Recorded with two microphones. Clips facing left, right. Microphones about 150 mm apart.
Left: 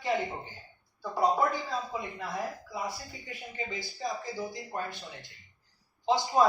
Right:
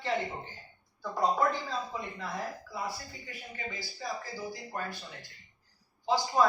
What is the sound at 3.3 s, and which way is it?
Speech, 20° left (ahead or behind).